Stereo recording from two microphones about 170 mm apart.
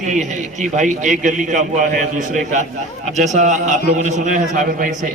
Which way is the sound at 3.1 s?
45° right (ahead or behind).